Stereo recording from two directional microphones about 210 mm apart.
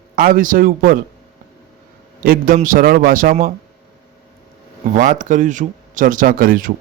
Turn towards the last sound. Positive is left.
turn(degrees=-40)  # may be behind; listen again after turning